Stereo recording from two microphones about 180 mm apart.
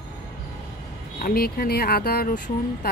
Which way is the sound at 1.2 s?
55° left (ahead or behind).